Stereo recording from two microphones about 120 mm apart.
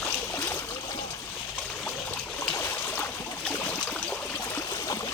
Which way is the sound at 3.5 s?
10° left (ahead or behind).